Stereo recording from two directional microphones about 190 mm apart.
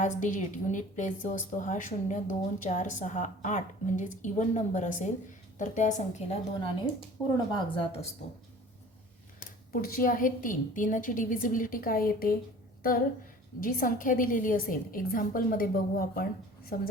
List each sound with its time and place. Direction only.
0.0 s a woman's voice: 40° left (ahead or behind)
7.3 s speech: 25° left (ahead or behind)
9.7 s a woman's voice: 50° left (ahead or behind)
13.6 s a woman's voice: 45° left (ahead or behind)